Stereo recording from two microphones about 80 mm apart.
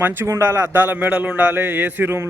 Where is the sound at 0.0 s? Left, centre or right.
Right.